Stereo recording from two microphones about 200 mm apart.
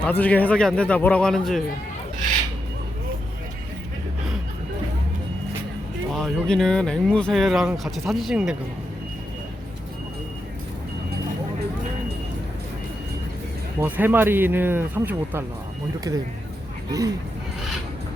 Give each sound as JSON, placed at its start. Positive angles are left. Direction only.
{"t": 0.0, "sound": "speech", "side_deg": 5}
{"t": 6.1, "sound": "speech", "side_deg": 0}
{"t": 13.7, "sound": "speech", "side_deg": -10}